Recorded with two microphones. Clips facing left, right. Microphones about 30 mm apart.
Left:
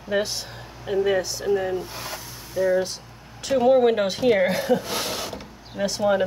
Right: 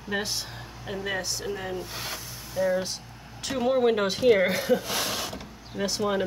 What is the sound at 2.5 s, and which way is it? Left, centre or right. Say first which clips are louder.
Speech: left 4 dB; centre.